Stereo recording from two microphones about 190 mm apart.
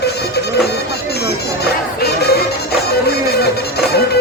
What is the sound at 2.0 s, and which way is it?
Music, 55° left (ahead or behind).